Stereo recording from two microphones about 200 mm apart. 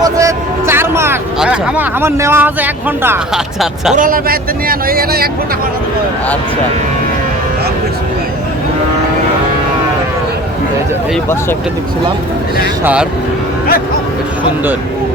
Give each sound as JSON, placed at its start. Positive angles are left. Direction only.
{"t": 0.0, "sound": "a sound", "side_deg": -15}
{"t": 3.9, "sound": "speech", "side_deg": -45}
{"t": 12.8, "sound": "speech", "side_deg": -5}